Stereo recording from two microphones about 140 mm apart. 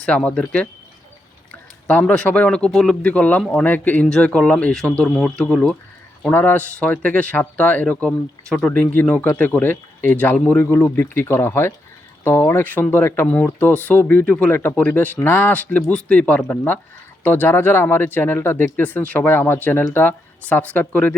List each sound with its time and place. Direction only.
0.0 s speech: 5° left (ahead or behind)
1.9 s speech: 10° left (ahead or behind)